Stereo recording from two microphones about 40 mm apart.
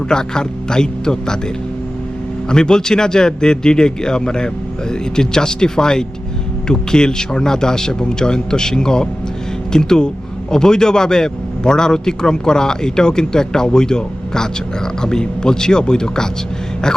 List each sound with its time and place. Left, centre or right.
0.1 s a man's voice: centre
2.5 s a man's voice: centre